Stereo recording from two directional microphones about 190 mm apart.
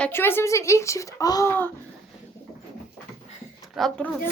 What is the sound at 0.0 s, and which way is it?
Speech, 10° left (ahead or behind).